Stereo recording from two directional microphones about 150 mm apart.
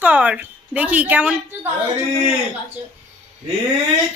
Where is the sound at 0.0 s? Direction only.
10° right (ahead or behind).